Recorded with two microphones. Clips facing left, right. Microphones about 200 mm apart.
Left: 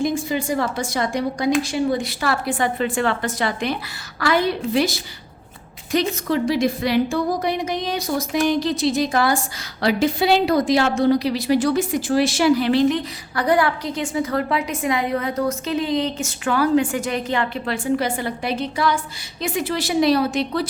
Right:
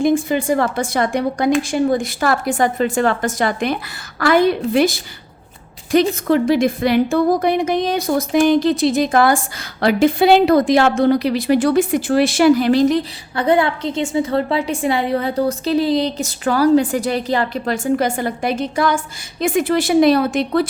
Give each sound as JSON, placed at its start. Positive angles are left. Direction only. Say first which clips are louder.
{"t": 0.0, "sound": "a woman's voice", "louder": "right 6 dB", "side_deg": -50}
{"t": 13.3, "sound": "a woman's voice", "louder": "right 3 dB", "side_deg": -25}